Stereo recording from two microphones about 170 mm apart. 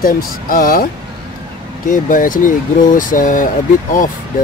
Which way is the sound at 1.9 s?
50° left (ahead or behind).